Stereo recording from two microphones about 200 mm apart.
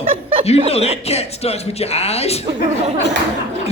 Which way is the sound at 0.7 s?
30° left (ahead or behind).